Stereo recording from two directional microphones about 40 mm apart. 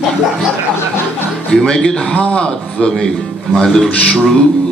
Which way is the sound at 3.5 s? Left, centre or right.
Centre.